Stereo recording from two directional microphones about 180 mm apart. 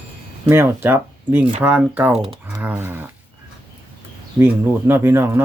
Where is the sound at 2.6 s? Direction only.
10° right (ahead or behind).